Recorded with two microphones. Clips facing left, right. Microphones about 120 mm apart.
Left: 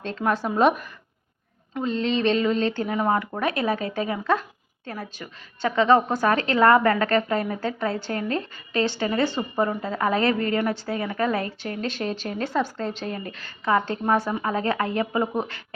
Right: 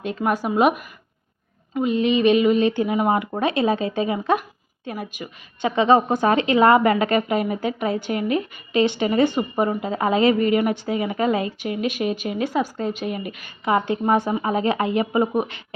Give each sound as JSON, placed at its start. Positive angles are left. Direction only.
{"t": 0.0, "sound": "a woman's voice", "side_deg": -10}